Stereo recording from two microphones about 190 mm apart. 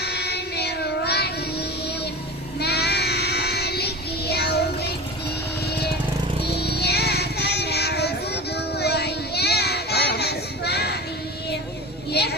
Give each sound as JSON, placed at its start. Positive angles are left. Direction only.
{"t": 0.0, "sound": "music", "side_deg": 60}
{"t": 2.6, "sound": "child singing", "side_deg": 60}
{"t": 5.6, "sound": "music", "side_deg": 60}
{"t": 12.2, "sound": "a sound", "side_deg": 60}